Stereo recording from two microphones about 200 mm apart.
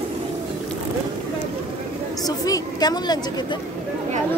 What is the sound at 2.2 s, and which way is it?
A woman's voice, 20° left (ahead or behind).